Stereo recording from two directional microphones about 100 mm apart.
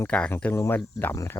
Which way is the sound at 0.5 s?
25° left (ahead or behind).